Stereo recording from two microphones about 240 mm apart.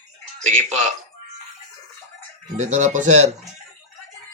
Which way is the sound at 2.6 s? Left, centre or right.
Right.